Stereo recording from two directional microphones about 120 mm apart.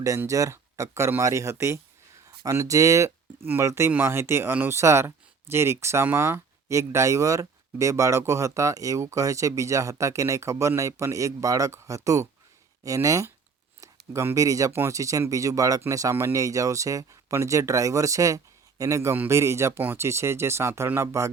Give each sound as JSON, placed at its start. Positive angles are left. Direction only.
{"t": 0.2, "sound": "speech", "side_deg": -25}